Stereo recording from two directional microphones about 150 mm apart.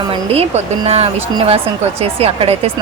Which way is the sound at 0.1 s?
40° right (ahead or behind).